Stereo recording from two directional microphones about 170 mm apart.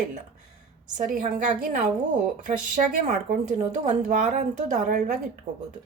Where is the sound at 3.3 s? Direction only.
50° right (ahead or behind).